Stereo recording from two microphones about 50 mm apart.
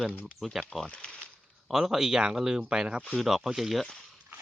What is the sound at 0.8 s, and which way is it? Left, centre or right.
Speech, centre.